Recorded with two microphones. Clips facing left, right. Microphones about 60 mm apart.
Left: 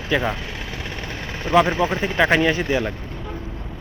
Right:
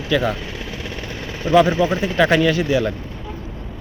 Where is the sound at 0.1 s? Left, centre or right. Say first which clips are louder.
Right 2 dB; centre.